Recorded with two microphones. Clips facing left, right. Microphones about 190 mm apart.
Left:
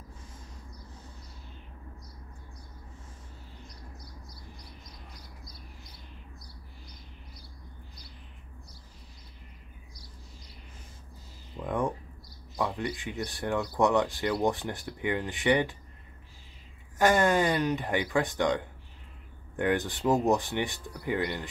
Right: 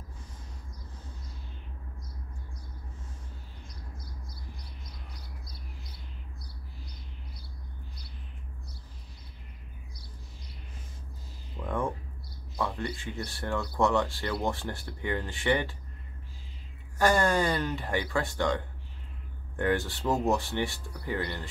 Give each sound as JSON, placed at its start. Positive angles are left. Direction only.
{"t": 11.6, "sound": "a sound", "side_deg": 15}
{"t": 12.5, "sound": "speech", "side_deg": 15}
{"t": 17.0, "sound": "speech", "side_deg": 20}